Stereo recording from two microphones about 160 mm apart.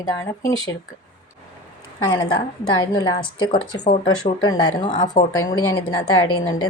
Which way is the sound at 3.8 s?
45° left (ahead or behind).